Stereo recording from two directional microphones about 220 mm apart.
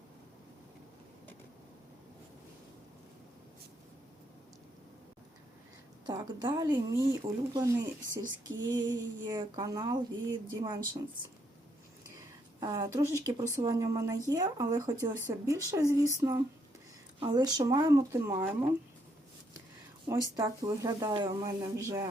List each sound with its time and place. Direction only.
6.1 s speech: 20° right (ahead or behind)
12.5 s speech: 20° right (ahead or behind)
20.3 s speech: 15° right (ahead or behind)